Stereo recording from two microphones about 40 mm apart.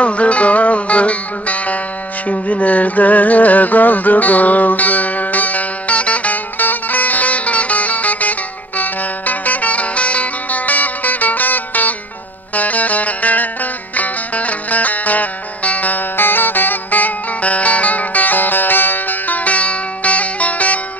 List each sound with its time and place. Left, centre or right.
0.0 s music: left